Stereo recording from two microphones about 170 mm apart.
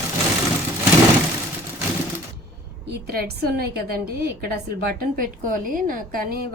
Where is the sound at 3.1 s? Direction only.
70° right (ahead or behind).